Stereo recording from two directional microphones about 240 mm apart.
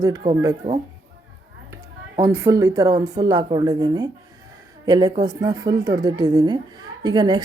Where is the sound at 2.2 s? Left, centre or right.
Centre.